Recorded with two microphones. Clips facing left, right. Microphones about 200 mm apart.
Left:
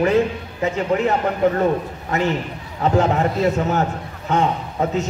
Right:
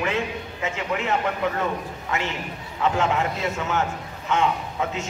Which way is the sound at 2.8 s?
40° left (ahead or behind).